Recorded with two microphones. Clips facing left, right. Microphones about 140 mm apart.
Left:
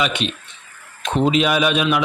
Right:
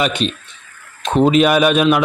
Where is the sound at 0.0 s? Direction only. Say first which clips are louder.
Right 3 dB; 40° right (ahead or behind).